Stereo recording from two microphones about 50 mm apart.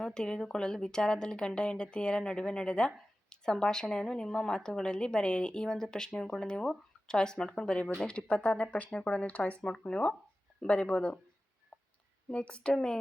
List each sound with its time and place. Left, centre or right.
0.0 s speech: centre; by 8.9 s left
8.9 s speech: centre
12.3 s speech: left